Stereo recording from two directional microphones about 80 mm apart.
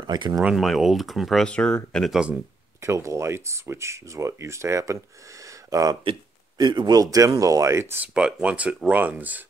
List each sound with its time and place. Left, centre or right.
0.0 s speech: right
0.4 s speech: centre
1.4 s speech: centre
2.8 s speech: right
5.4 s a sound: right
6.6 s speech: right
7.9 s speech: centre